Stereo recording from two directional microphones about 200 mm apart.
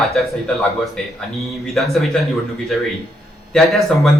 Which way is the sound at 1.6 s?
Centre (ahead or behind).